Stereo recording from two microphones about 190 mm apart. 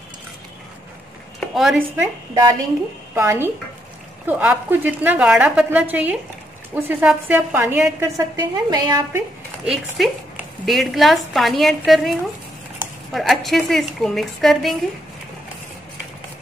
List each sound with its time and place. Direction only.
1.5 s speech: centre (ahead or behind)
2.0 s a woman's voice: 15° right (ahead or behind)
9.7 s a woman's voice: centre (ahead or behind)